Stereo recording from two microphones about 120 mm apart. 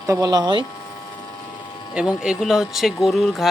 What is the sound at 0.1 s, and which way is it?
Speech, 30° right (ahead or behind).